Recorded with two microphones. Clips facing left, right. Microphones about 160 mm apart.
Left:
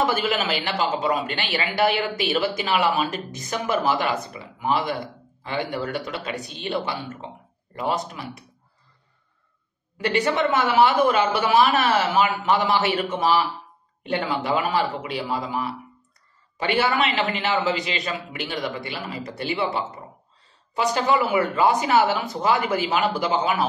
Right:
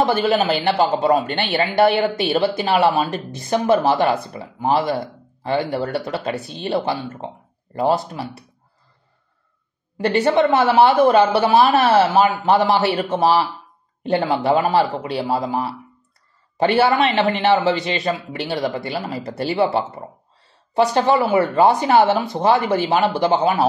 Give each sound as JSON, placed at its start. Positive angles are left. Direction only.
{"t": 0.0, "sound": "speech", "side_deg": -30}
{"t": 10.0, "sound": "speech", "side_deg": -35}